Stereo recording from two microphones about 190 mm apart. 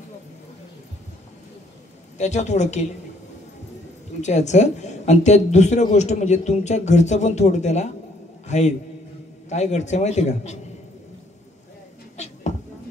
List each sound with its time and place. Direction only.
2.1 s speech: 35° left (ahead or behind)
4.2 s speech: 35° left (ahead or behind)